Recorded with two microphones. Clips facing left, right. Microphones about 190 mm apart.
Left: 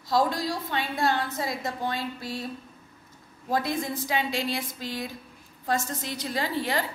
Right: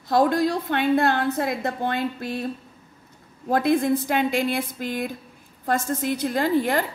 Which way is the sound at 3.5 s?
60° right (ahead or behind).